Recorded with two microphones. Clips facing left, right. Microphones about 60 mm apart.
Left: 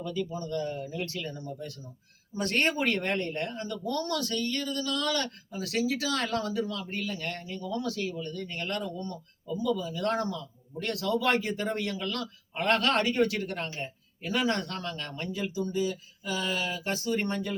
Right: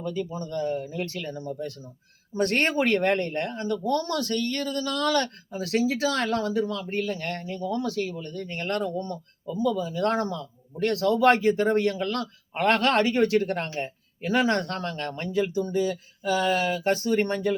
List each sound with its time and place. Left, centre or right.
0.0 s speech: right